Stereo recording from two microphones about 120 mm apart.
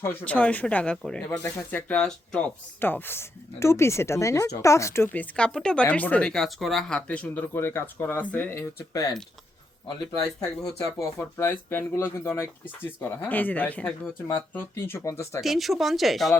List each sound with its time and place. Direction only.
0.0 s speech: 15° left (ahead or behind)
8.9 s speech: 30° left (ahead or behind)
10.8 s speech: 25° left (ahead or behind)
15.4 s speech: centre (ahead or behind)